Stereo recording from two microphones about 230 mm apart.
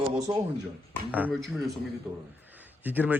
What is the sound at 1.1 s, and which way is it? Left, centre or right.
A man's voice, centre.